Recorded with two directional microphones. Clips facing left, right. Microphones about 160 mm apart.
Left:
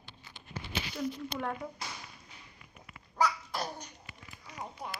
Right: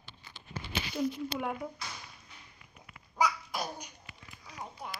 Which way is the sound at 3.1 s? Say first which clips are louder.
Even; 15° right (ahead or behind).